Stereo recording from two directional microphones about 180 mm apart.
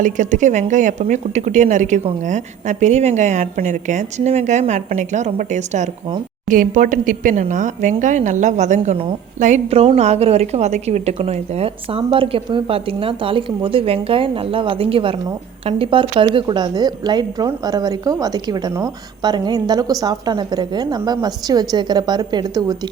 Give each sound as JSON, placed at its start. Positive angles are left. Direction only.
{"t": 0.0, "sound": "a woman's voice", "side_deg": -45}